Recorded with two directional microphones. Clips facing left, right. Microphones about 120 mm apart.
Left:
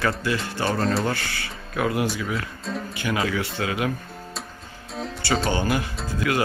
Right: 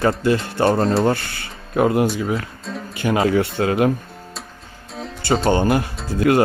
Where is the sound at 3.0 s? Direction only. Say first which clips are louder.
Right 9 dB; 40° right (ahead or behind).